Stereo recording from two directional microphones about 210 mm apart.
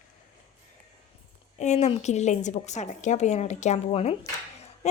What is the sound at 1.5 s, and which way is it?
A woman's voice, 35° left (ahead or behind).